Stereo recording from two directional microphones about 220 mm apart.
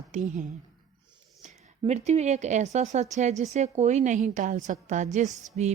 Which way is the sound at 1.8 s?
30° right (ahead or behind).